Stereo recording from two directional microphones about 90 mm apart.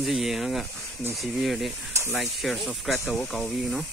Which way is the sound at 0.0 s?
Centre (ahead or behind).